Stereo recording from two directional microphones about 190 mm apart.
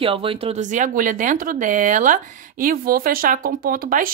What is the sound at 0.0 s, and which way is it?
Speech, 30° right (ahead or behind).